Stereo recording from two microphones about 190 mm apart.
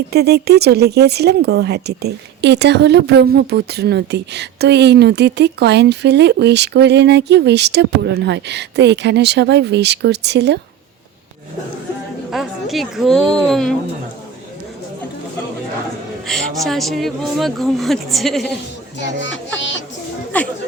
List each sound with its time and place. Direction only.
0.1 s speech: 60° right (ahead or behind)
12.3 s speech: centre (ahead or behind)
16.2 s speech: centre (ahead or behind)
18.9 s speech: 70° left (ahead or behind)
20.3 s speech: 5° left (ahead or behind)